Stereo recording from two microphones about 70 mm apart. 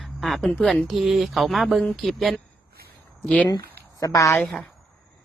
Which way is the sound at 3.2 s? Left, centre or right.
Left.